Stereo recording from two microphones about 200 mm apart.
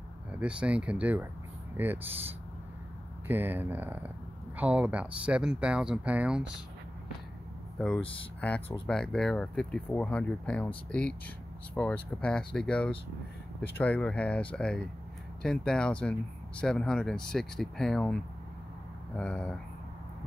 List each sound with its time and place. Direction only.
0.3 s speech: 5° right (ahead or behind)
8.0 s speech: 25° left (ahead or behind)
8.4 s speech: 10° left (ahead or behind)